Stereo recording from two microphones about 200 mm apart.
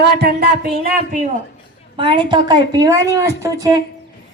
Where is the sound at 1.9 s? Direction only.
25° right (ahead or behind).